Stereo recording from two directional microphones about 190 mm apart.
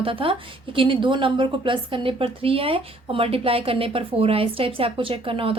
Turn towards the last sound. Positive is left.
turn(degrees=-30)  # may be behind; listen again after turning